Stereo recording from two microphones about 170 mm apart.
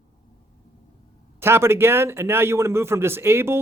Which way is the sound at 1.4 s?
15° right (ahead or behind).